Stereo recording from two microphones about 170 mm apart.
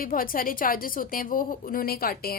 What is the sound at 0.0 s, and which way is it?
A woman's voice, 55° left (ahead or behind).